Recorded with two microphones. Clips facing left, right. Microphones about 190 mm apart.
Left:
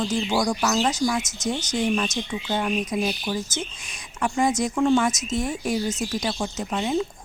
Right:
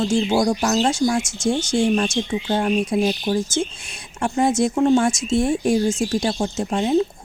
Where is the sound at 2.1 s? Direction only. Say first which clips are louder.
Right 5 dB; 30° right (ahead or behind).